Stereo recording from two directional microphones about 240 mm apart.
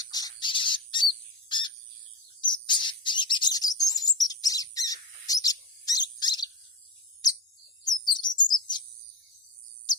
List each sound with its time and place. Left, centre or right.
0.1 s bird: centre
7.9 s chirp: centre